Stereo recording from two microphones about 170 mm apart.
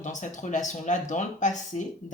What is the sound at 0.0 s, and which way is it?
Speech, 45° left (ahead or behind).